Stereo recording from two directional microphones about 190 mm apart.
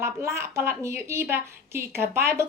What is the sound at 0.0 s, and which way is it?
A woman's voice, 15° right (ahead or behind).